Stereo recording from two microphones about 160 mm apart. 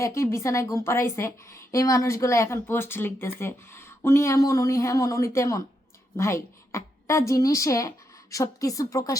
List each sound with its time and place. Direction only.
0.0 s a woman's voice: 15° left (ahead or behind)